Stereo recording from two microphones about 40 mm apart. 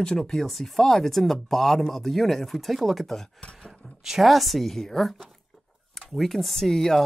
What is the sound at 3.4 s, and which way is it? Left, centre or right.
Speech, left.